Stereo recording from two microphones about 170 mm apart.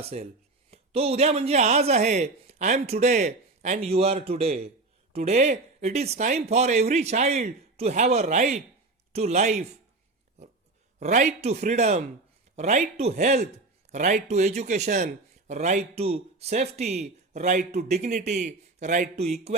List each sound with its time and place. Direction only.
0.0 s a man's voice: 35° right (ahead or behind)
11.0 s a man's voice: 45° right (ahead or behind)